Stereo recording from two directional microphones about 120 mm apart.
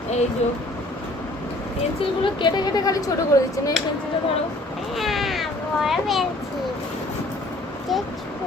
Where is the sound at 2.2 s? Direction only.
40° left (ahead or behind).